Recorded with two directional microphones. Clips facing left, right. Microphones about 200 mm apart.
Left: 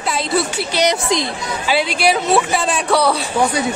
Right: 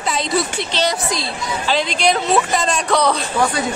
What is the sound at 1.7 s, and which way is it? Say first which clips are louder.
Speech: left 2 dB; 10° left (ahead or behind).